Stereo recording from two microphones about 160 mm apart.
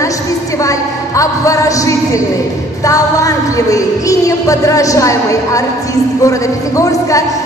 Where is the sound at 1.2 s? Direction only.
20° left (ahead or behind).